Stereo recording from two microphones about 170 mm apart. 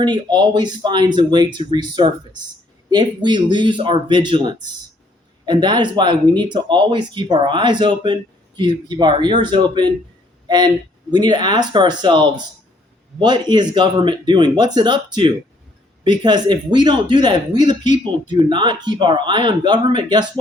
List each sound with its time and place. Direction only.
0.0 s speech: 25° right (ahead or behind)
11.1 s speech: 25° right (ahead or behind)